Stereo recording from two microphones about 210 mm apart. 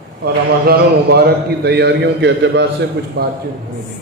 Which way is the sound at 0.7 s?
50° right (ahead or behind).